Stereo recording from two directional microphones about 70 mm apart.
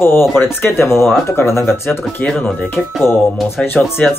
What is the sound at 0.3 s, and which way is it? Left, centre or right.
Speech, left.